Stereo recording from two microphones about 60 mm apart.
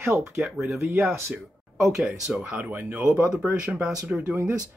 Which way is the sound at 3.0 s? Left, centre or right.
Centre.